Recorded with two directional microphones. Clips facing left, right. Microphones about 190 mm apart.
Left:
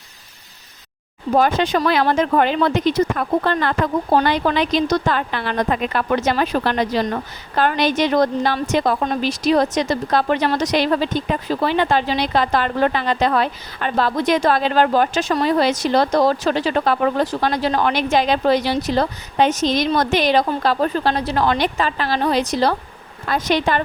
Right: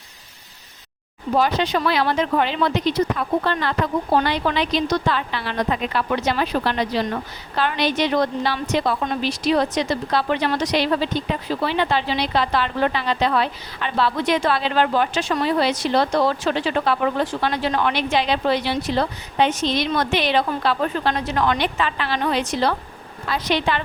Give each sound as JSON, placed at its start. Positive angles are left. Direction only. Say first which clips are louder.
{"t": 1.4, "sound": "a woman's voice", "louder": "left 3 dB", "side_deg": 50}